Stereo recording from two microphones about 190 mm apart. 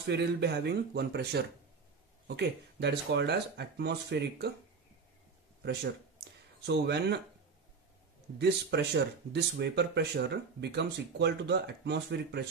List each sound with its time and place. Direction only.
0.0 s speech: 60° right (ahead or behind)
5.6 s a sound: 60° right (ahead or behind)
8.4 s speech: 60° right (ahead or behind)